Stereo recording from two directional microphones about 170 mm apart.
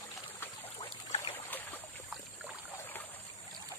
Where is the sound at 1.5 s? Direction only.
10° left (ahead or behind).